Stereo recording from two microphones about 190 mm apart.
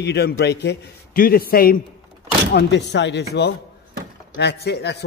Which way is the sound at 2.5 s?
65° left (ahead or behind).